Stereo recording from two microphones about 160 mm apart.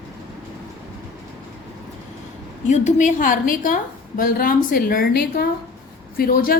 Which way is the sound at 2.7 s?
50° left (ahead or behind).